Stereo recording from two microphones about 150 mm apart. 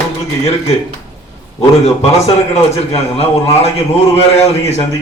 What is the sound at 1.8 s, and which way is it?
A man's voice, 45° left (ahead or behind).